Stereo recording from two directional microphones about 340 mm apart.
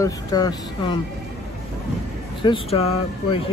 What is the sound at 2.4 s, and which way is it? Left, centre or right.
Speech, centre.